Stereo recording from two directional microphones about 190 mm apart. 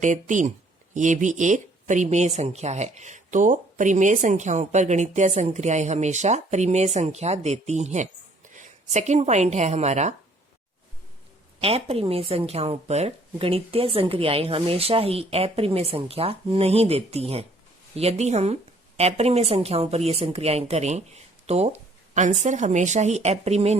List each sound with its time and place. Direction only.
0.0 s a woman's voice: 40° right (ahead or behind)
11.6 s speech: 30° right (ahead or behind)